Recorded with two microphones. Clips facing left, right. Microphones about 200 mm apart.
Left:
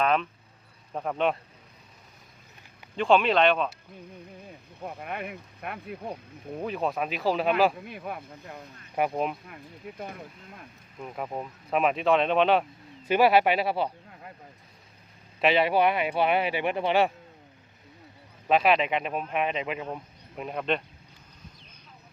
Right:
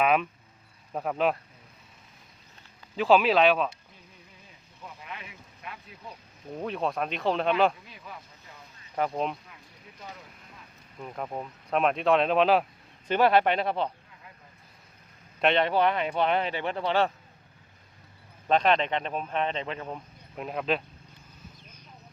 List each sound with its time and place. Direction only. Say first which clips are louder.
0.0 s speech: right 1 dB; 10° right (ahead or behind)
2.9 s speech: right 1 dB; 5° right (ahead or behind)
4.4 s speech: left 7 dB; 60° left (ahead or behind)
6.6 s speech: left 1 dB; 5° left (ahead or behind)
7.9 s speech: left 9 dB; 60° left (ahead or behind)
9.0 s speech: left 2 dB; 10° left (ahead or behind)
10.0 s speech: left 4 dB; 55° left (ahead or behind)
11.0 s speech: left 1 dB; 5° left (ahead or behind)
14.1 s a sound: left 7 dB; 55° left (ahead or behind)
15.4 s speech: left 1 dB; 5° left (ahead or behind)
18.4 s speech: left 1 dB; 5° left (ahead or behind)